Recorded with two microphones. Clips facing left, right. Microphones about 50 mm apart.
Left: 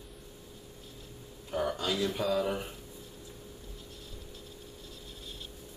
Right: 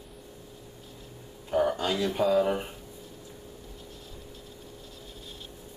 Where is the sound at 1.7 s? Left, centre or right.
Right.